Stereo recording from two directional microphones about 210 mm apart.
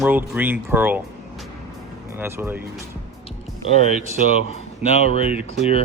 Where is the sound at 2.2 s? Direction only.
10° right (ahead or behind).